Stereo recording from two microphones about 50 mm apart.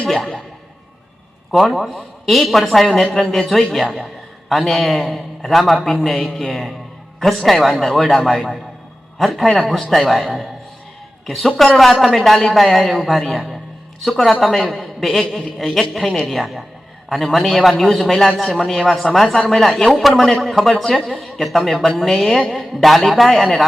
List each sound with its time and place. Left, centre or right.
0.0 s boing: centre
1.5 s a man's voice: centre